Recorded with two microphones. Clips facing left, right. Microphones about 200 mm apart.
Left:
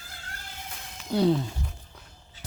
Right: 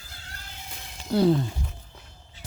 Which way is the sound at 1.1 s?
Centre (ahead or behind).